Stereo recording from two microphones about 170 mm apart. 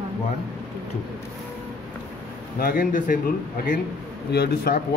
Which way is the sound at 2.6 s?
55° left (ahead or behind).